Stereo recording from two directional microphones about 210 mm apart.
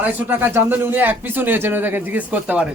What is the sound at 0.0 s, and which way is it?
Speech, 10° right (ahead or behind).